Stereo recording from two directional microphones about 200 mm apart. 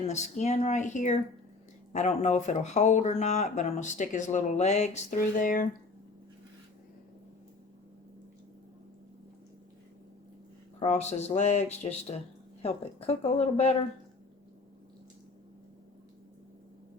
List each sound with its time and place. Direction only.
0.1 s speech: 35° left (ahead or behind)
10.8 s speech: 35° left (ahead or behind)